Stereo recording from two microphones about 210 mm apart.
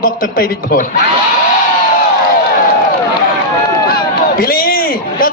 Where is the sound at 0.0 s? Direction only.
45° left (ahead or behind).